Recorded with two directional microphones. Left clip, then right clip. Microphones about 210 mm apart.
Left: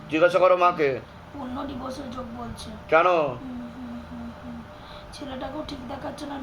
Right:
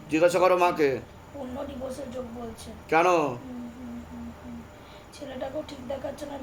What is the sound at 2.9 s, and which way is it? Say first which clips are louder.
Speech: left 3 dB; 40° right (ahead or behind).